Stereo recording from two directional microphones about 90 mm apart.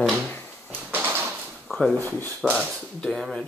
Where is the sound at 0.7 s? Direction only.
20° right (ahead or behind).